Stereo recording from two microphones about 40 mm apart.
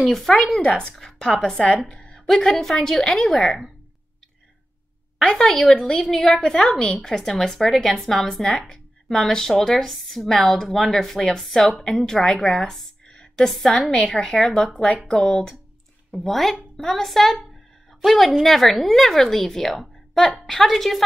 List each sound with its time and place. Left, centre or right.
0.0 s a woman's voice: centre
1.5 s speech: left
1.9 s a sound: left
2.2 s a woman's voice: centre
5.2 s a woman's voice: centre
13.0 s a sound: left
13.8 s speech: left
14.2 s a woman's voice: centre
16.2 s a woman's voice: centre